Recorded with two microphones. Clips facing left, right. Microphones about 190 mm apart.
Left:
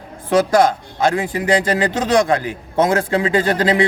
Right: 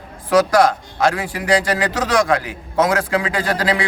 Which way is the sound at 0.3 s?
25° left (ahead or behind).